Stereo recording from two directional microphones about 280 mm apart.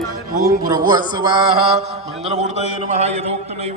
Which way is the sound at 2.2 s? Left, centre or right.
Right.